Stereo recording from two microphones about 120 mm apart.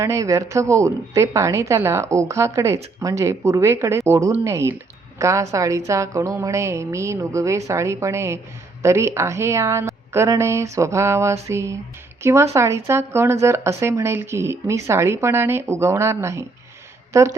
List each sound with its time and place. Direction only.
0.0 s a woman's voice: 25° right (ahead or behind)